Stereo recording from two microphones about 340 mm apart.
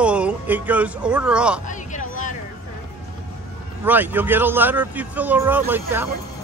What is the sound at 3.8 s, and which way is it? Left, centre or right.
Speech, centre.